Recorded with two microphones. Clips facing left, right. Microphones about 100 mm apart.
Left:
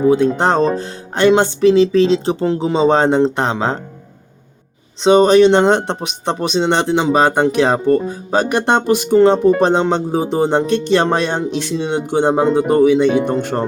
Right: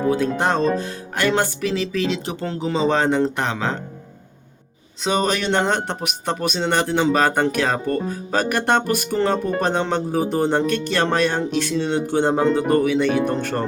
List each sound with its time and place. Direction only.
0.1 s speech: 30° left (ahead or behind)
4.9 s speech: 30° left (ahead or behind)